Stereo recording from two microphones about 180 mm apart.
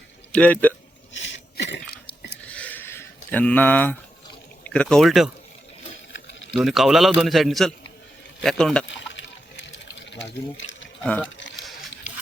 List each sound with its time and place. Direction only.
0.3 s speech: 5° left (ahead or behind)
1.1 s a sound: 90° left; by 2.3 s 70° left (ahead or behind)
2.5 s sheep: 10° left (ahead or behind)
4.6 s a man's voice: 5° left (ahead or behind)
6.1 s a sound: 90° left
6.6 s a man's voice: centre (ahead or behind)
8.9 s chop: 85° left
10.1 s speech: 80° left
11.0 s speech: 10° left (ahead or behind)